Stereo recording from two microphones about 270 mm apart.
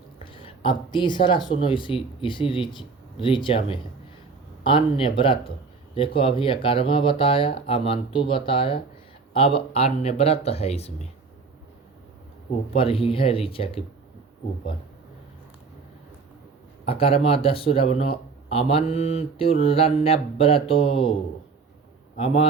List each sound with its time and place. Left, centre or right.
0.3 s speech: centre
12.7 s speech: centre
16.8 s a man's voice: left